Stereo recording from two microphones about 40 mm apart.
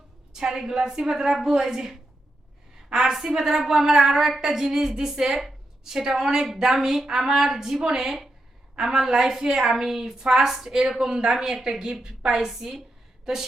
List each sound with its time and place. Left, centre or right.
0.3 s a woman's voice: centre
12.5 s a woman's voice: centre